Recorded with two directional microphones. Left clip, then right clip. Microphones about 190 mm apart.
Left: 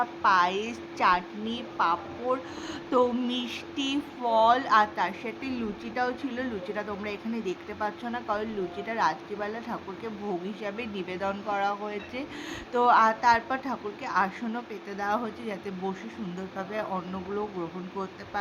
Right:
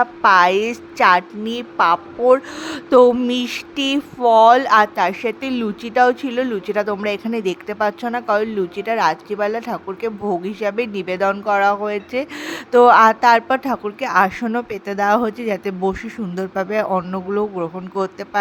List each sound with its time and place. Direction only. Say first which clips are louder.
0.0 s a woman's voice: right 11 dB; 45° right (ahead or behind)